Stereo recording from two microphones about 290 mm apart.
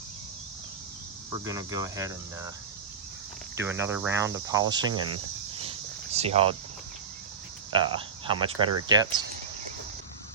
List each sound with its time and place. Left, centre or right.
1.5 s cricket: centre
3.6 s cricket: centre
6.1 s speech: right
7.7 s speech: centre
8.6 s cricket: centre